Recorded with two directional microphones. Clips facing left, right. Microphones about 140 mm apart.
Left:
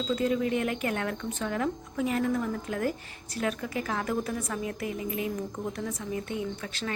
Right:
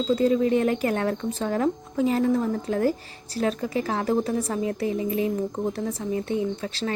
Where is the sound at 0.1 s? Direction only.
35° right (ahead or behind).